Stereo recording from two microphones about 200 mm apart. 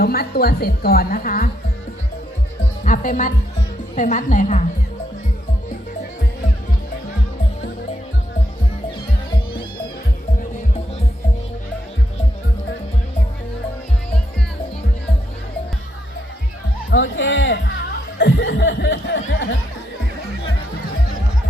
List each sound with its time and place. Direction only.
0.0 s a woman's voice: 50° left (ahead or behind)
2.8 s a woman's voice: 40° left (ahead or behind)
16.9 s speech: 70° left (ahead or behind)
18.2 s chuckle: 60° left (ahead or behind)
19.3 s speech: 65° left (ahead or behind)